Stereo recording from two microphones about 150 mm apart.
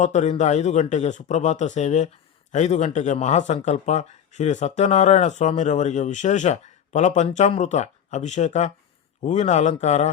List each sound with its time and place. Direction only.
0.0 s speech: 50° left (ahead or behind)